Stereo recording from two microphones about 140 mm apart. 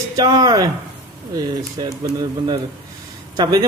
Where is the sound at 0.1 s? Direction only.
30° right (ahead or behind).